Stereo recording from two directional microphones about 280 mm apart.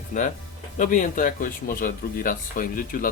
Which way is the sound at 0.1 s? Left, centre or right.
Left.